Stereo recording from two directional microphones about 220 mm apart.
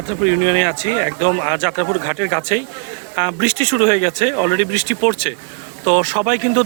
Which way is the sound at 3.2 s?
45° right (ahead or behind).